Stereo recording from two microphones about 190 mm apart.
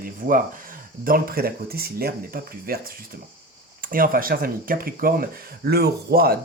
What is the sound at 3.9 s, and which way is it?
Speech, 50° right (ahead or behind).